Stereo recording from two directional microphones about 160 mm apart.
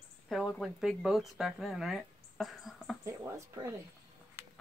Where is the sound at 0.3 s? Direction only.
Centre (ahead or behind).